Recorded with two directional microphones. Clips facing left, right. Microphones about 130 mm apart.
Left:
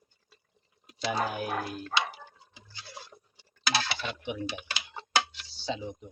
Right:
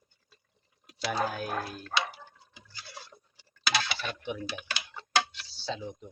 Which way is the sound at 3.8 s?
15° left (ahead or behind).